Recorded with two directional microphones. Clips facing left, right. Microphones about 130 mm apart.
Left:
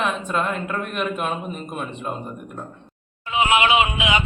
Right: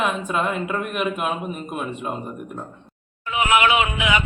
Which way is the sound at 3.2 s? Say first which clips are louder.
Even; 25° left (ahead or behind).